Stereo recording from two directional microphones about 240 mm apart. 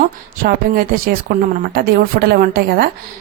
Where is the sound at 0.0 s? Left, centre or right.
Right.